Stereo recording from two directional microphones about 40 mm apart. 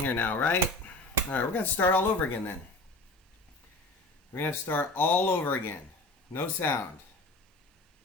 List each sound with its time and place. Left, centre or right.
0.0 s speech: left
4.4 s speech: left